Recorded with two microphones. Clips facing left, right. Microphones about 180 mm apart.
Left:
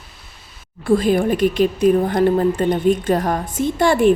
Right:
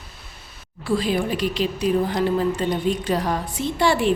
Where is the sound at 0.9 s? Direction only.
50° left (ahead or behind).